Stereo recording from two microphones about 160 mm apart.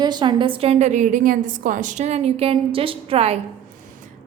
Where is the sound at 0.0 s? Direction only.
30° right (ahead or behind).